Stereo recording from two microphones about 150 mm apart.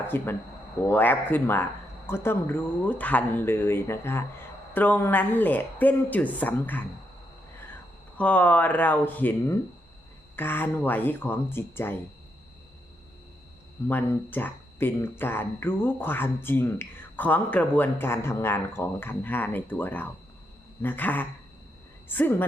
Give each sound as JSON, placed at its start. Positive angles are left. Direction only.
{"t": 0.1, "sound": "speech", "side_deg": 15}
{"t": 8.2, "sound": "speech", "side_deg": 10}
{"t": 13.8, "sound": "speech", "side_deg": 15}